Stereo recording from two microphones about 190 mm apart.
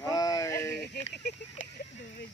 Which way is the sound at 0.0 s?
20° left (ahead or behind).